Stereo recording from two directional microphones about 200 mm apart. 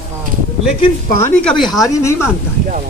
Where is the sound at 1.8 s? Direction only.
15° left (ahead or behind).